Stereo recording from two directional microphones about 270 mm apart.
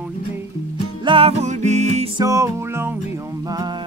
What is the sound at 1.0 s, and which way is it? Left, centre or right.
Music, right.